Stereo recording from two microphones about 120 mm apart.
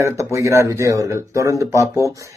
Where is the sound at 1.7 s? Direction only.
25° left (ahead or behind).